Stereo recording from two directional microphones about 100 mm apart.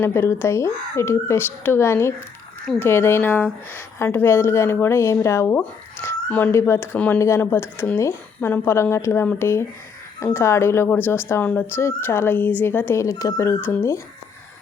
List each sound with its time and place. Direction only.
0.0 s speech: 25° left (ahead or behind)
13.3 s speech: 20° left (ahead or behind)